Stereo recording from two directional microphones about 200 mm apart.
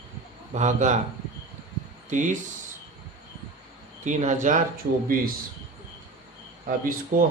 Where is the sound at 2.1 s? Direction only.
40° right (ahead or behind).